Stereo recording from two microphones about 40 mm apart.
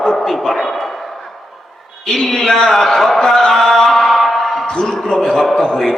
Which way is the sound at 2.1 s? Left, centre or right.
Centre.